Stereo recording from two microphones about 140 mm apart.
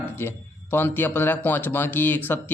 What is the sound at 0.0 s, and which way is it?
A man's voice, 15° left (ahead or behind).